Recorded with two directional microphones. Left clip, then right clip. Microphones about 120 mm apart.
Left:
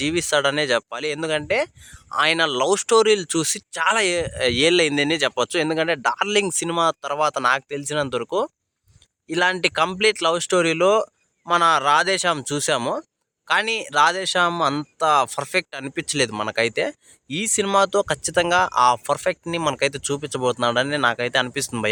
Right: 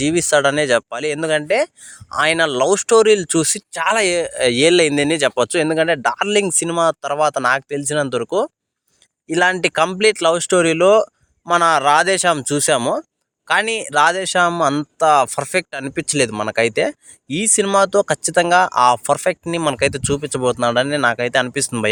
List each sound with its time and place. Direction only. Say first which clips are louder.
0.0 s speech: right 5 dB; 35° right (ahead or behind)